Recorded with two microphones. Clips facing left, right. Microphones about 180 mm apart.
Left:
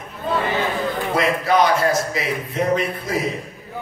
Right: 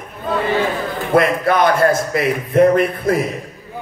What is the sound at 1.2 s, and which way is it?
A man's voice, 55° right (ahead or behind).